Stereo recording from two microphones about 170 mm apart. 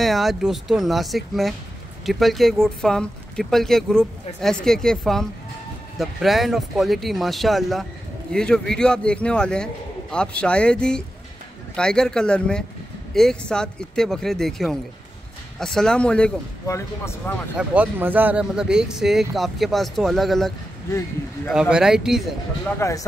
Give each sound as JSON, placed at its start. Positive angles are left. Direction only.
{"t": 0.0, "sound": "speech", "side_deg": 0}
{"t": 16.6, "sound": "speech", "side_deg": 15}
{"t": 17.6, "sound": "speech", "side_deg": -10}
{"t": 22.8, "sound": "speech", "side_deg": 20}